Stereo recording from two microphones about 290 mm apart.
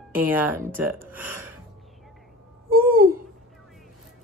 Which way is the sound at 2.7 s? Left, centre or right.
Right.